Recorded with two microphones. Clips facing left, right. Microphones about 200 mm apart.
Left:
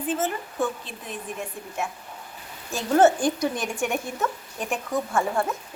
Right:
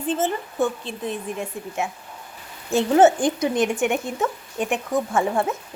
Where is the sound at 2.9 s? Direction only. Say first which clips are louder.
Right 2 dB; 20° right (ahead or behind).